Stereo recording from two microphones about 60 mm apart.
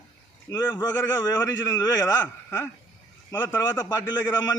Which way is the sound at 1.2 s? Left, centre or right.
Left.